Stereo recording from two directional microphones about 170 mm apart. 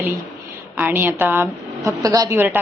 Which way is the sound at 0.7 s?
10° right (ahead or behind).